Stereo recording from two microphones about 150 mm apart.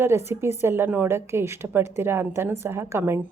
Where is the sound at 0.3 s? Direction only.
15° right (ahead or behind).